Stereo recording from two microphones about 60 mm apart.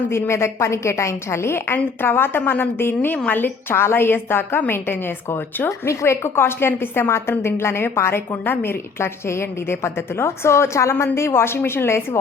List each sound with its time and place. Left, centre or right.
0.1 s a woman's voice: left
5.6 s a woman's voice: left